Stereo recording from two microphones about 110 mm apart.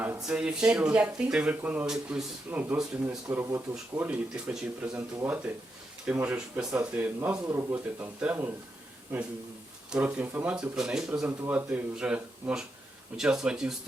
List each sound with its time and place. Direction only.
0.3 s speech: 10° right (ahead or behind)
1.9 s speech: 5° right (ahead or behind)
6.9 s speech: 15° right (ahead or behind)
9.9 s speech: 10° right (ahead or behind)
11.3 s speech: 15° right (ahead or behind)